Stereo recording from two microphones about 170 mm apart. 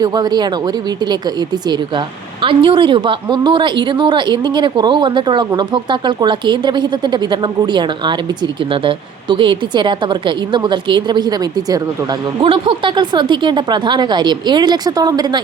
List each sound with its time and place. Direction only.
0.0 s speech: 25° right (ahead or behind)
2.4 s speech: 30° right (ahead or behind)